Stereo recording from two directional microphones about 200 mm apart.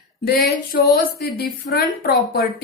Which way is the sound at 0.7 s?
50° left (ahead or behind).